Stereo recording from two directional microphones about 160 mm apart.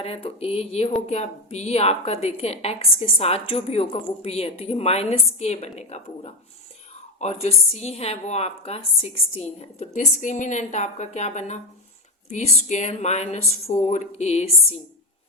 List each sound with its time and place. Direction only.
0.0 s a woman's voice: 40° left (ahead or behind)